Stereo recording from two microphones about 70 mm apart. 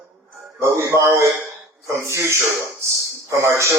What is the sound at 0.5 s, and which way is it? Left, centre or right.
Speech, right.